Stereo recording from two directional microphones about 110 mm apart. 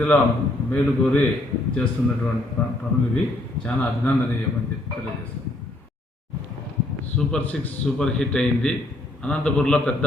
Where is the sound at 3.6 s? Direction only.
15° left (ahead or behind).